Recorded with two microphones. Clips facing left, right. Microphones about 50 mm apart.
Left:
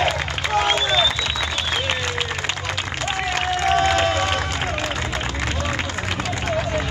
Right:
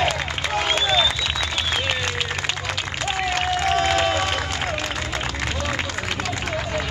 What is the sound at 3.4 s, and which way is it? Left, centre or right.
Crowd, centre.